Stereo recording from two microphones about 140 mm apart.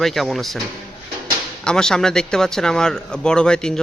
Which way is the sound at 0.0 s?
Centre (ahead or behind).